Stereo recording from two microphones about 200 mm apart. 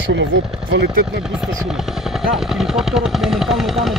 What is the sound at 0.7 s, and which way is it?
Speech, 55° right (ahead or behind).